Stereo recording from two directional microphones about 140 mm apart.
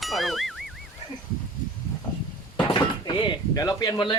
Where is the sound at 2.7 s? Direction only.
35° left (ahead or behind).